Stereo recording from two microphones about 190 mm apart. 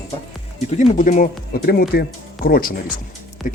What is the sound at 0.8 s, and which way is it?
Speech, 40° left (ahead or behind).